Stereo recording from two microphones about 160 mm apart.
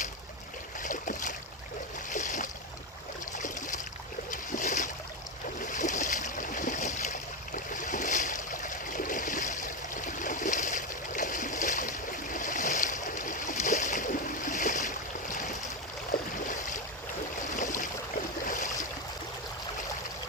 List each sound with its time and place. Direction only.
0.8 s boat: 55° left (ahead or behind)
5.6 s stream: 50° left (ahead or behind)
16.5 s boat: 55° left (ahead or behind)
18.4 s boat: 55° left (ahead or behind)